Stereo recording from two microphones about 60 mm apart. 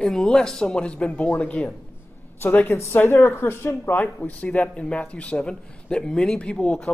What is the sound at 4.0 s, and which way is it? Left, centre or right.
Speech, left.